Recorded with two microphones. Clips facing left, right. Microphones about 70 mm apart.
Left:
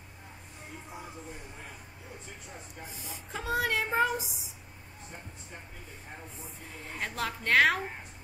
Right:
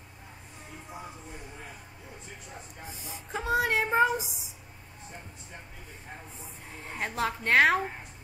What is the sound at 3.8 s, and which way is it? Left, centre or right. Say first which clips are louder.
Child singing: right 4 dB; centre.